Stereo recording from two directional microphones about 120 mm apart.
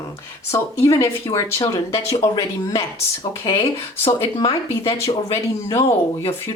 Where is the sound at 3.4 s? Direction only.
50° left (ahead or behind).